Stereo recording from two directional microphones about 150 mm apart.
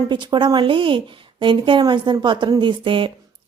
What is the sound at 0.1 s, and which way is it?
A woman's voice, 30° right (ahead or behind).